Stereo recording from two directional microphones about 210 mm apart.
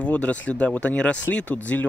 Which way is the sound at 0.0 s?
5° left (ahead or behind).